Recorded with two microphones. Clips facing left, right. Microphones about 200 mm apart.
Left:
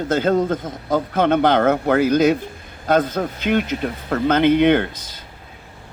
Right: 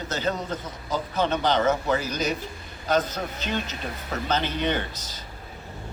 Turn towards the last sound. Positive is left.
turn(degrees=55)  # may be behind; listen again after turning